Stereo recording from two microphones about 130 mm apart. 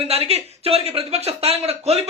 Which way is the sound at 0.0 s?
50° right (ahead or behind).